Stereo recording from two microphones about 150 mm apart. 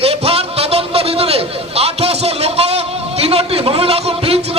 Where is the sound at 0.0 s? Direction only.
40° right (ahead or behind).